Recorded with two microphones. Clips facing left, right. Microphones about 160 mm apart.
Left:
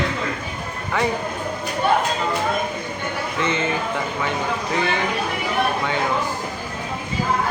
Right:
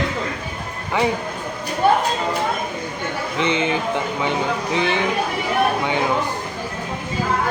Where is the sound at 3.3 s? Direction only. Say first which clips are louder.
Right 3 dB; 15° right (ahead or behind).